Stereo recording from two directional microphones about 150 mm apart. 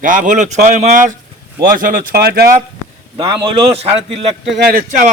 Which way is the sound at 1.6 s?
65° right (ahead or behind).